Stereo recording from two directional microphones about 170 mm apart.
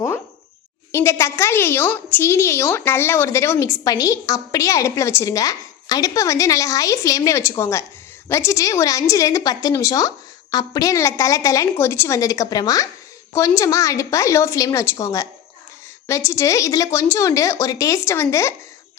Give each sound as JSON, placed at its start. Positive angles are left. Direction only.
{"t": 0.9, "sound": "a woman's voice", "side_deg": 15}